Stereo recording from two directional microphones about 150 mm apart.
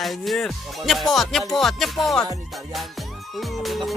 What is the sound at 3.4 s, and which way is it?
Speech, centre (ahead or behind).